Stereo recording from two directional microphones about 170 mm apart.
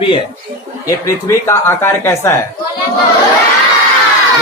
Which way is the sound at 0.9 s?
15° left (ahead or behind).